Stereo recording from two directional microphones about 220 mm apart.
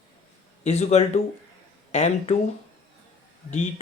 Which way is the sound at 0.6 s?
30° left (ahead or behind).